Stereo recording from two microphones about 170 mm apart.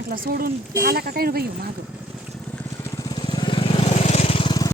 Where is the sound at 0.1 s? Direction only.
60° right (ahead or behind).